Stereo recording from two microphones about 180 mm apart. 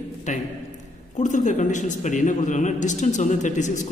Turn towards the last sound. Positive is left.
turn(degrees=45)  # may be behind; listen again after turning